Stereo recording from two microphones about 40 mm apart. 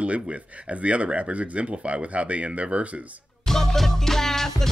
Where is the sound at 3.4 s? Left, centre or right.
Centre.